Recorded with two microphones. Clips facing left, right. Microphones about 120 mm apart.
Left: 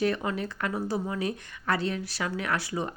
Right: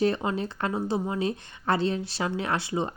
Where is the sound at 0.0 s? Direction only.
25° right (ahead or behind).